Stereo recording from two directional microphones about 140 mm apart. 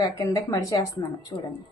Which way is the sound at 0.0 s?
25° left (ahead or behind).